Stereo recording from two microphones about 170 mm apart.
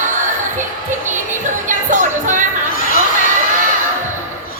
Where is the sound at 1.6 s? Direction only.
50° right (ahead or behind).